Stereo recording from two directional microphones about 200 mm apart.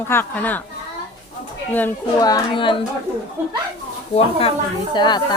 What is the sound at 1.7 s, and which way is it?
Speech, 15° left (ahead or behind).